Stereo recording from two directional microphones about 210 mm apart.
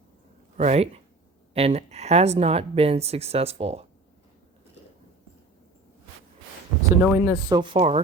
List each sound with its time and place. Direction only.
0.5 s speech: 35° right (ahead or behind)
6.9 s speech: 10° right (ahead or behind)
7.6 s speech: 25° right (ahead or behind)